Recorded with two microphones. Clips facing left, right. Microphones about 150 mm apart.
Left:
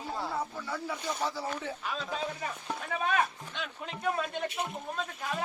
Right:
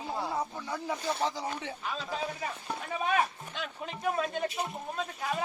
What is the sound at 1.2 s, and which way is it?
Speech, 15° right (ahead or behind).